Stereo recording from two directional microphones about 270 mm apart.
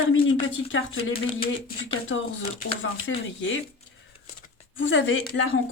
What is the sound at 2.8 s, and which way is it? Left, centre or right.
Speech, left.